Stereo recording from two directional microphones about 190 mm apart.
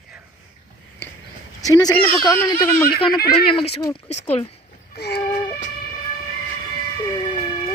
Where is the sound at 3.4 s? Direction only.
30° left (ahead or behind).